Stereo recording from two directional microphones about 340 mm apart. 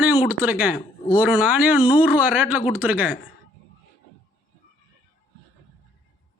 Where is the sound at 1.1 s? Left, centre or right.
Centre.